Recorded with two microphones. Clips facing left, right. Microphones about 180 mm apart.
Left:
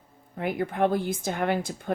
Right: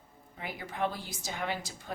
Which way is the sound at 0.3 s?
55° left (ahead or behind).